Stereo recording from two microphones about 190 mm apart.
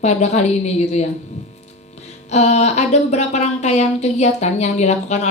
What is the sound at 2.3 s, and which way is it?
A woman's voice, 35° left (ahead or behind).